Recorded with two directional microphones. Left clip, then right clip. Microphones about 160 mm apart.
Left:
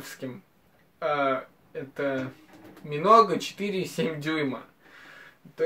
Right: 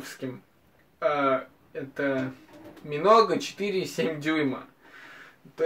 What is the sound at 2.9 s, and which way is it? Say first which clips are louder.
Speech: left 1 dB; 20° left (ahead or behind).